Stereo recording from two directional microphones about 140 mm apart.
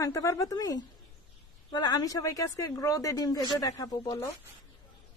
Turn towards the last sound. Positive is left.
turn(degrees=25)  # may be behind; listen again after turning